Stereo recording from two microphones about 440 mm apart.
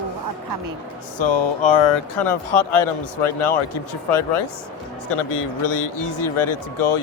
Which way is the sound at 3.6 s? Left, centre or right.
Left.